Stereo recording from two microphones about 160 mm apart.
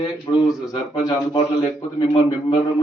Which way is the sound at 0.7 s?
30° left (ahead or behind).